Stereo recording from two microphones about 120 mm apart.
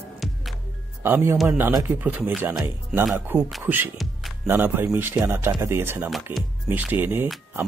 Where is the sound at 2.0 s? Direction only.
15° right (ahead or behind).